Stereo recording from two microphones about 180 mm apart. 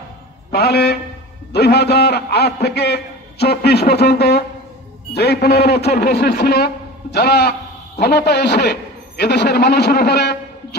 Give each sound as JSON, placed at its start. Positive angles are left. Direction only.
{"t": 0.5, "sound": "a man's voice", "side_deg": 65}